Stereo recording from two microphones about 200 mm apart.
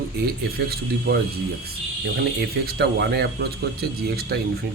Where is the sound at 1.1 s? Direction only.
55° right (ahead or behind).